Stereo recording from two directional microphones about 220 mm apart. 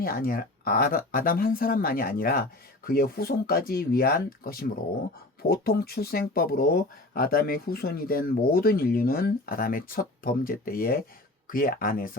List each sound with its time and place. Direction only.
0.0 s speech: 40° left (ahead or behind)